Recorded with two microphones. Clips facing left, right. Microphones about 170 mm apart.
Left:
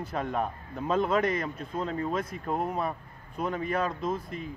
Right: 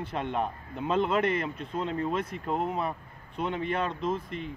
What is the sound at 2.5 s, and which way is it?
Speech, 5° left (ahead or behind).